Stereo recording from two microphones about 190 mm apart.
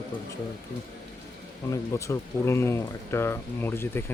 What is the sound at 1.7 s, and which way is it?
Speech, 15° left (ahead or behind).